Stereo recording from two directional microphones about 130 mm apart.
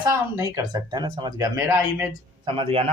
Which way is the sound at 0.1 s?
25° right (ahead or behind).